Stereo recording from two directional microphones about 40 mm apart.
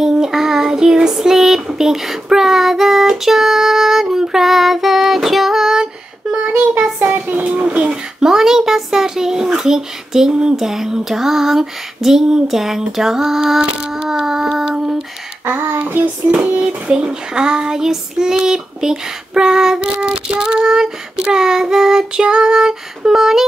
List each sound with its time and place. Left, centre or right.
0.0 s child singing: centre
7.2 s a sound: right
7.9 s a child's voice: centre
10.5 s child singing: centre
13.6 s child singing: centre
16.3 s child singing: right; by 23.4 s centre